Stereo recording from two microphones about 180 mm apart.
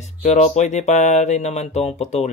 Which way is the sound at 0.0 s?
40° left (ahead or behind).